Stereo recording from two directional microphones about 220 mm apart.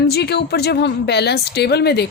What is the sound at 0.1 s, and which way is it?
A woman's voice, 50° left (ahead or behind).